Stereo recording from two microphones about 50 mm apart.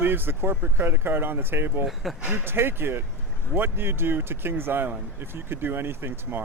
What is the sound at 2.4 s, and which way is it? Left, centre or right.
Speech, right.